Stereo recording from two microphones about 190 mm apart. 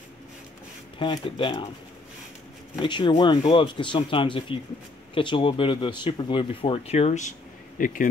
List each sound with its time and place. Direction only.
0.9 s speech: 25° left (ahead or behind)
2.8 s speech: 25° left (ahead or behind); by 8.1 s 45° left (ahead or behind)